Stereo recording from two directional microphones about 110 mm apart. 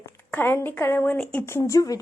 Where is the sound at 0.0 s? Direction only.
20° left (ahead or behind).